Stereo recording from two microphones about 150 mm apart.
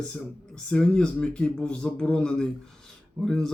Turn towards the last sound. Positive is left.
turn(degrees=5)  # may be behind; listen again after turning